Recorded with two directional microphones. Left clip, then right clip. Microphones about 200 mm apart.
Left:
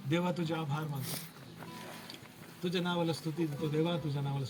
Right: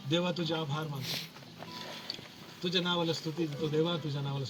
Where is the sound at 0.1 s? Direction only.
25° left (ahead or behind).